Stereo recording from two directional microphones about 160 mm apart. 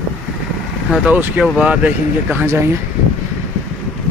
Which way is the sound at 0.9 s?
5° right (ahead or behind).